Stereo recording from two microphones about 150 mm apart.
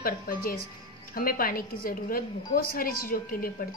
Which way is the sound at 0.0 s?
75° left (ahead or behind).